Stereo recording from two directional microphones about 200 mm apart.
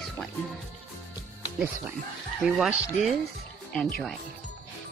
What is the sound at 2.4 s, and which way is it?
Speech, centre (ahead or behind).